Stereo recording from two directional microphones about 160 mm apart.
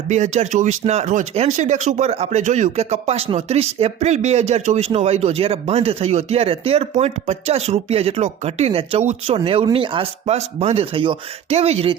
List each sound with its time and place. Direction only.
0.1 s speech: 45° right (ahead or behind)